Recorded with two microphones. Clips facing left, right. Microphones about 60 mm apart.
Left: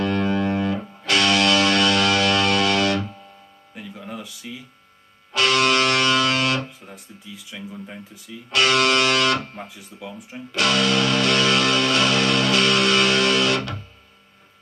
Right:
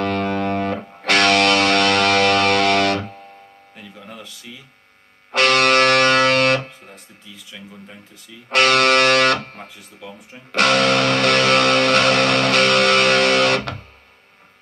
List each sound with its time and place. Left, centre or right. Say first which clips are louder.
0.0 s music: right 1 dB; right
5.3 s music: right 4 dB; right
8.5 s speech: right 4 dB; right
10.5 s music: right 4 dB; right